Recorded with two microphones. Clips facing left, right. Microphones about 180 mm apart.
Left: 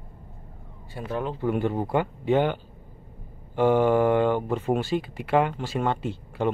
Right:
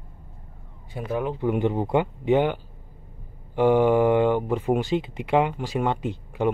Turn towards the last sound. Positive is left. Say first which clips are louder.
# right 2 dB
turn(degrees=-15)  # may be behind; listen again after turning